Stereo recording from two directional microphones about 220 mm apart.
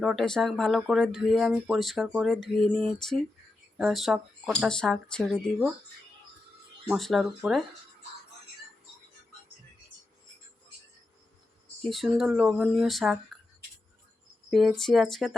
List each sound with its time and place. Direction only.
0.0 s speech: centre (ahead or behind)
6.8 s speech: centre (ahead or behind)
11.8 s speech: centre (ahead or behind)
14.5 s speech: centre (ahead or behind)